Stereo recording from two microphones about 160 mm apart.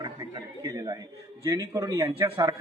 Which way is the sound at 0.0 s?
20° right (ahead or behind).